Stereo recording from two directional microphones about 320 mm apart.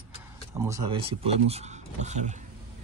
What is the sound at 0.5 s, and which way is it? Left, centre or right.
Speech, centre.